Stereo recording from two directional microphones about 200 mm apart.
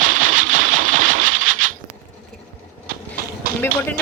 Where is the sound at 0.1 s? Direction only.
90° right.